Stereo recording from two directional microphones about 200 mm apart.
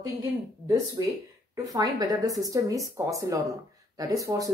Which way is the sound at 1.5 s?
20° right (ahead or behind).